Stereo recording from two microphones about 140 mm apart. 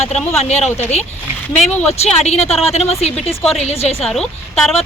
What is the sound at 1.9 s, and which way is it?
A woman's voice, 50° left (ahead or behind).